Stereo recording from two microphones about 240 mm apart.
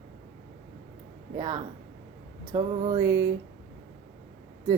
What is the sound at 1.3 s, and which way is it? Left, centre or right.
A woman's voice, centre.